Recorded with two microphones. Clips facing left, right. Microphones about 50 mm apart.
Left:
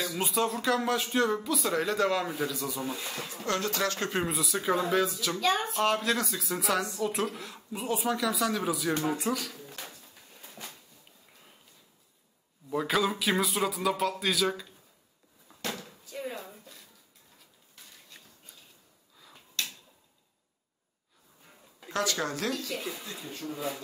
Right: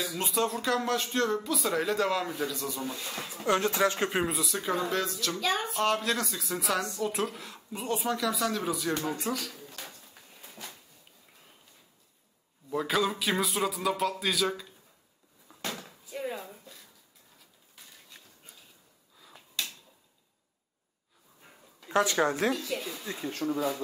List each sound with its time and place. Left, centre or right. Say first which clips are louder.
0.0 s speech: left 1 dB; centre
3.1 s speech: even; centre
3.4 s speech: right 4 dB; right
4.2 s speech: even; centre
8.9 s speech: left 2 dB; centre
9.2 s speech: left 2 dB; centre
10.6 s a sound: even; centre
12.6 s speech: even; centre
15.4 s a sound: left 1 dB; centre
17.8 s a sound: even; centre
19.1 s finger snapping: even; centre
21.9 s speech: right 5 dB; right
22.8 s speech: left 1 dB; centre
23.4 s speech: right 8 dB; right